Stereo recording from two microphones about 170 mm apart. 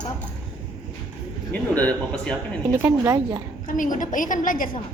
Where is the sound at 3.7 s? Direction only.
50° left (ahead or behind).